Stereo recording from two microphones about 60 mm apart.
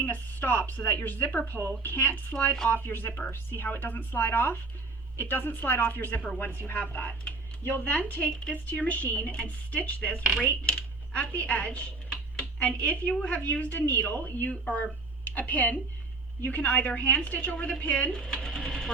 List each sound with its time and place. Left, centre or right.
0.0 s a woman's voice: left
14.5 s a woman's voice: centre
18.1 s speech: centre